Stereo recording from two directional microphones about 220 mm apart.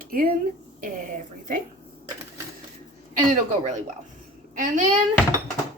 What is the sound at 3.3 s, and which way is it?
Speech, 35° right (ahead or behind).